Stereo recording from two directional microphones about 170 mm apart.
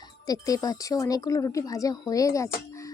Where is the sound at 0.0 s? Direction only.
20° left (ahead or behind).